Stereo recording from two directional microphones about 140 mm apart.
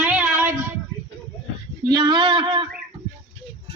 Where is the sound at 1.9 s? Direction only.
30° right (ahead or behind).